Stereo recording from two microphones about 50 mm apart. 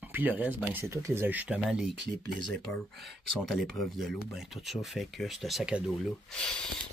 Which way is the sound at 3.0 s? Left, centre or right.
Centre.